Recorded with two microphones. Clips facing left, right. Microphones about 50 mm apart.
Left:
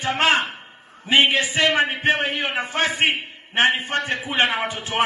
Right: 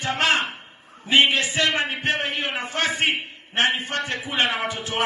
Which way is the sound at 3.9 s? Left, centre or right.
Left.